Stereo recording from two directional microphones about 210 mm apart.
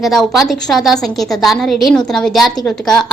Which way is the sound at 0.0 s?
Centre (ahead or behind).